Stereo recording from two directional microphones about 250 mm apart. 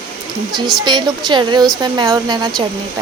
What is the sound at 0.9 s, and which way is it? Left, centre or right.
Speech, centre.